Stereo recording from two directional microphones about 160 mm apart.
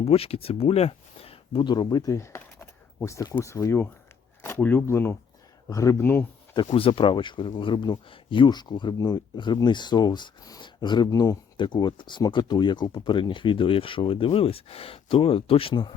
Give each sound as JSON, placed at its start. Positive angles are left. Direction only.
{"t": 0.0, "sound": "speech", "side_deg": 40}
{"t": 6.7, "sound": "speech", "side_deg": 35}